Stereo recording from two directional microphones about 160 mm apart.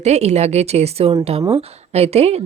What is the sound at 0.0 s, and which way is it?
Speech, 45° right (ahead or behind).